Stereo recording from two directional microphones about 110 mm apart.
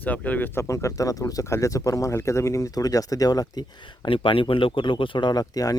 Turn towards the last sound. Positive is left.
turn(degrees=35)  # may be behind; listen again after turning